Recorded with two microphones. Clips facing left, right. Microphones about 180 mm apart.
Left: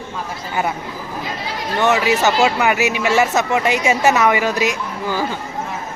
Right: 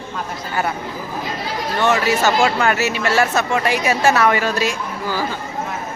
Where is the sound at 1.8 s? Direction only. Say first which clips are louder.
Left 1 dB; 15° left (ahead or behind).